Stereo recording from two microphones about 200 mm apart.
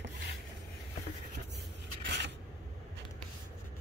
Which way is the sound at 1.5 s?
60° right (ahead or behind).